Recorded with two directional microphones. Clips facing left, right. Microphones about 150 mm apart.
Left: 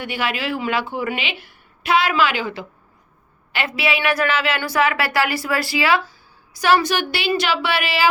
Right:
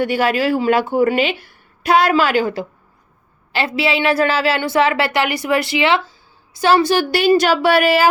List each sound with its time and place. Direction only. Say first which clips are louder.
0.0 s speech: right 8 dB; 40° right (ahead or behind)
3.5 s a woman's voice: right 4 dB; 30° right (ahead or behind)